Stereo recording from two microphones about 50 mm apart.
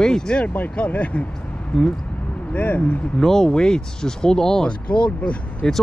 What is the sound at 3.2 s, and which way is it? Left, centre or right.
Speech, centre.